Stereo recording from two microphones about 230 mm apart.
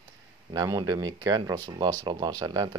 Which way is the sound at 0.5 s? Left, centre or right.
Centre.